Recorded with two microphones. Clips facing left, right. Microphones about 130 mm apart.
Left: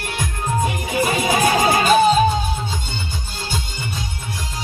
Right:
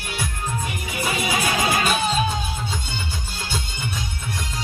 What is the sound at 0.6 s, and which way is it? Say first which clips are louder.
Music: left 10 dB; 45° left (ahead or behind).